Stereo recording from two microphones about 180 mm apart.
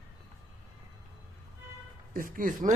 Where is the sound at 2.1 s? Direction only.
50° right (ahead or behind).